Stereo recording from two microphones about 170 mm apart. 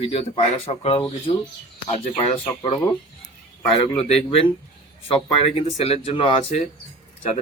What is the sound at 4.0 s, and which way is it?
Speech, 35° left (ahead or behind).